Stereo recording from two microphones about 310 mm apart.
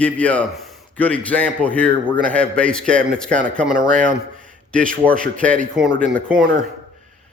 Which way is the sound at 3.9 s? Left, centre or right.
Right.